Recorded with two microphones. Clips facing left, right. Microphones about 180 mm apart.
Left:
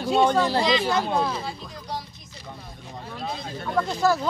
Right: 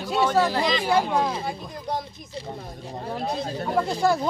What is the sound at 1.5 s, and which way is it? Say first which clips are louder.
Speech: right 4 dB; 50° right (ahead or behind).